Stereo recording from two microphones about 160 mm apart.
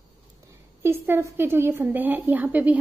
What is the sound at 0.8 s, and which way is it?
A woman's voice, 15° right (ahead or behind).